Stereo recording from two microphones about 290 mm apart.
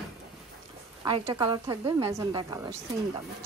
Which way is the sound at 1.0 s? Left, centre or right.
Centre.